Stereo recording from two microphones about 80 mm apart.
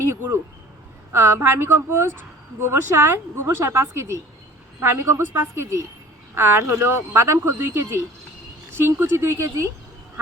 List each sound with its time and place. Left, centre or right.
1.1 s speech: right